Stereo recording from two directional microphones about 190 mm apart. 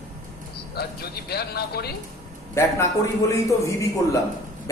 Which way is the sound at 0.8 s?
55° left (ahead or behind).